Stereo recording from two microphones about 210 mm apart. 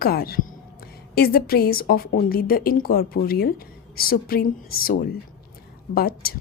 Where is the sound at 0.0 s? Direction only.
45° left (ahead or behind).